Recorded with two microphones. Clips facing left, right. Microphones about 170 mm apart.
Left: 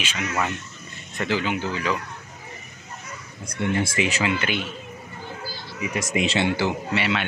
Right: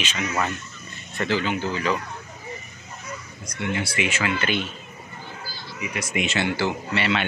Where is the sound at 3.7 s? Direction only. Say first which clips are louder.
Left 2 dB; 45° left (ahead or behind).